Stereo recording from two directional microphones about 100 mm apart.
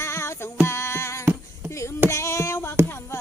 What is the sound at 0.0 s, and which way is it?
Music, 25° left (ahead or behind).